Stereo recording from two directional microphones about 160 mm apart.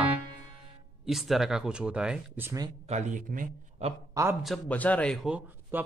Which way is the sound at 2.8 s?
45° right (ahead or behind).